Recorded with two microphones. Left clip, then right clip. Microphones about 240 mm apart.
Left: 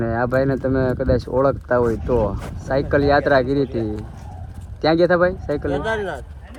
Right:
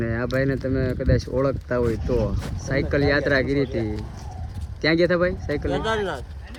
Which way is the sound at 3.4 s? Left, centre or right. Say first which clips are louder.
Left 3 dB; left.